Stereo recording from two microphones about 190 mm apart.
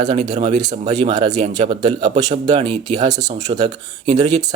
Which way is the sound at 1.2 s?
35° right (ahead or behind).